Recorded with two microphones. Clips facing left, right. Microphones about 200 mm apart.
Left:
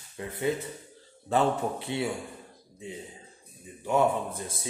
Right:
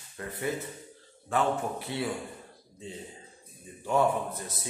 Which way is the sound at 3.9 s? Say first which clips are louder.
Left 1 dB; 30° left (ahead or behind).